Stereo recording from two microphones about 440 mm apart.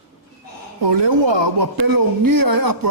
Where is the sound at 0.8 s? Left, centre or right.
Right.